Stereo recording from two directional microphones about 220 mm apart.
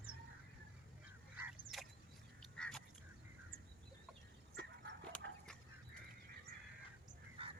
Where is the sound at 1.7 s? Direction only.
Centre (ahead or behind).